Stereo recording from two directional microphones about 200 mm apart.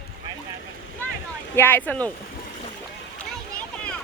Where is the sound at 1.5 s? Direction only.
10° left (ahead or behind).